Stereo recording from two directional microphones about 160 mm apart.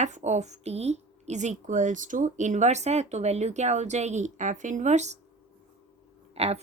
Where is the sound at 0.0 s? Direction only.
45° right (ahead or behind).